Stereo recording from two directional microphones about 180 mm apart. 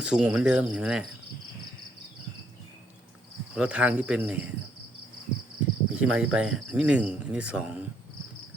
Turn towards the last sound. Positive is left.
turn(degrees=-5)  # may be behind; listen again after turning